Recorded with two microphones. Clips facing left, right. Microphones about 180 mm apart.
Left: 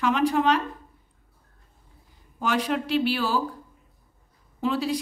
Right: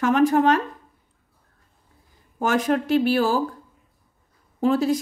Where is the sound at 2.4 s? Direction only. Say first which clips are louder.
Right 4 dB; 50° right (ahead or behind).